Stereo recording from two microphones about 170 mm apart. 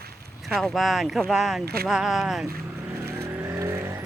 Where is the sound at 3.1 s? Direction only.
15° right (ahead or behind).